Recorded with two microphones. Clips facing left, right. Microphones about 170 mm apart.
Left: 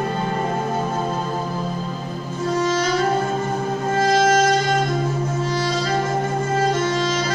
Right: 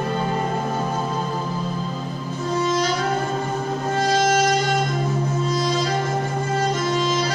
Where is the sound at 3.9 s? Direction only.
45° left (ahead or behind).